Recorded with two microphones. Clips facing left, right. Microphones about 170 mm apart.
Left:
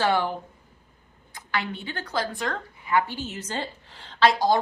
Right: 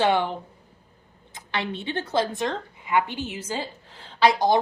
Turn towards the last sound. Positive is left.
turn(degrees=-15)  # may be behind; listen again after turning